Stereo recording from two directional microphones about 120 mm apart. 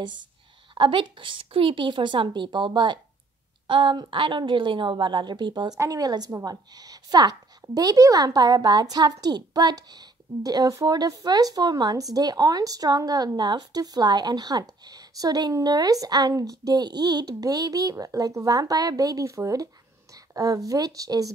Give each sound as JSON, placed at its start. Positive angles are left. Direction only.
{"t": 0.7, "sound": "a woman's voice", "side_deg": -45}